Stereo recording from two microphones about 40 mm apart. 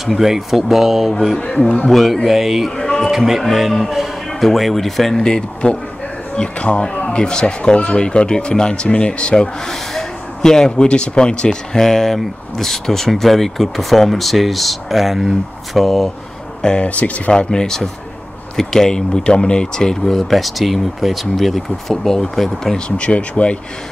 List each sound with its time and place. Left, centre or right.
0.0 s speech: centre
2.2 s speech: centre
2.7 s a sound: centre
3.1 s speech: centre; by 11.8 s left
11.8 s speech: centre
16.6 s speech: left
16.9 s speech: left
17.3 s speech: centre
20.3 s speech: centre
22.8 s speech: left